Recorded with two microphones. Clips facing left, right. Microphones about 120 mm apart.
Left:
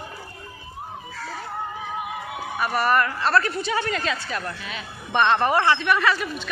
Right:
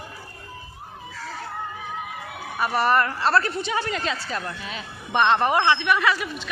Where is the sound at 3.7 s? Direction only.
15° right (ahead or behind).